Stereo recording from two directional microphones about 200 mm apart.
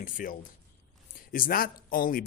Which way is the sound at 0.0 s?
40° left (ahead or behind).